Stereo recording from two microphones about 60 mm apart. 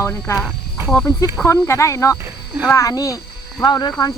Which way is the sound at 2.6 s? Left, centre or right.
Left.